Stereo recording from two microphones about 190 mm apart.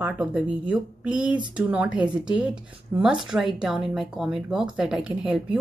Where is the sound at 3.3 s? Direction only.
5° right (ahead or behind).